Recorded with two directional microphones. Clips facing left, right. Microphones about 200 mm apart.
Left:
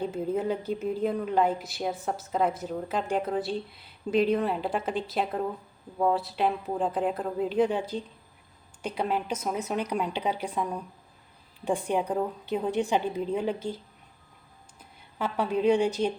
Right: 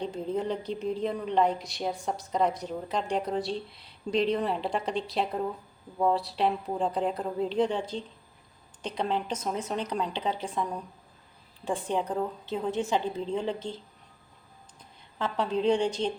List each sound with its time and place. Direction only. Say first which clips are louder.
0.0 s a woman's voice: left 2 dB; 5° left (ahead or behind)
15.2 s a woman's voice: left 1 dB; 10° left (ahead or behind)